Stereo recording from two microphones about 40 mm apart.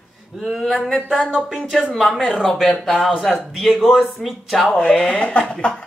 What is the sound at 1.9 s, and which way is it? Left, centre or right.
Speech, centre.